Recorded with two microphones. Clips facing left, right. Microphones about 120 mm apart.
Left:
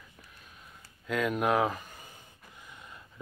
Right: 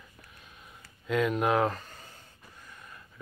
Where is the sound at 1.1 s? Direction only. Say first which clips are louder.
Right 2 dB; centre (ahead or behind).